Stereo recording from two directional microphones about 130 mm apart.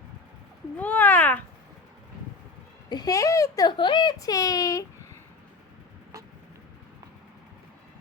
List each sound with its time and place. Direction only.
0.8 s cat: 10° left (ahead or behind)
2.9 s speech: 30° left (ahead or behind)